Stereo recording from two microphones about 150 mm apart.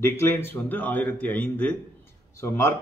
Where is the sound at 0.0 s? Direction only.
15° left (ahead or behind).